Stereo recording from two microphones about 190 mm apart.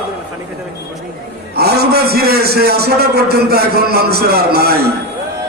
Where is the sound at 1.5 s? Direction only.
55° right (ahead or behind).